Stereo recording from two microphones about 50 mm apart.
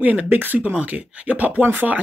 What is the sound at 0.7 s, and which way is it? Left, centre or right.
Speech, right.